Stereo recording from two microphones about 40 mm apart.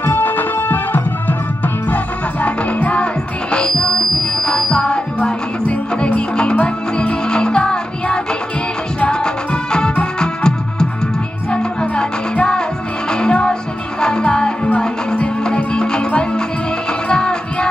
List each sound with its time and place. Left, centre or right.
0.0 s music: left
2.4 s music: left
4.4 s music: centre
4.6 s music: left
7.2 s music: left
9.5 s music: left
17.1 s music: left